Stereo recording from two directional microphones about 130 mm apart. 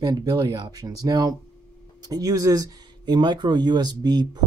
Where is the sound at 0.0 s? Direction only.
30° right (ahead or behind).